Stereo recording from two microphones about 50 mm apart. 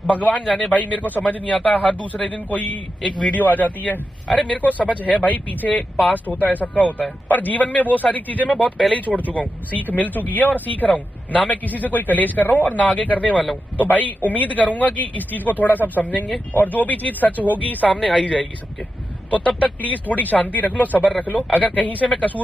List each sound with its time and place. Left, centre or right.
0.0 s a man's voice: left
18.1 s a man's voice: left